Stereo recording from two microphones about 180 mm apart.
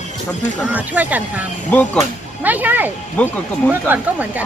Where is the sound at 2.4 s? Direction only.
10° right (ahead or behind).